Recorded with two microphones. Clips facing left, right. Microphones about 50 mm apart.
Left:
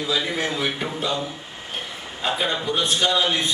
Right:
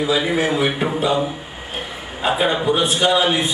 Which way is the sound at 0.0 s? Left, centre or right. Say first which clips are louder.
Right 6 dB; centre.